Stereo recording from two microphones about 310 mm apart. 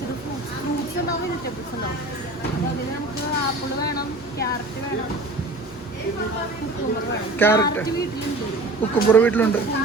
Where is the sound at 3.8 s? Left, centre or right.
Left.